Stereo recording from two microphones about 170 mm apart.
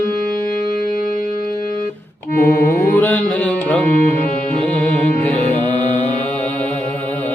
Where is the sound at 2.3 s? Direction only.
60° left (ahead or behind).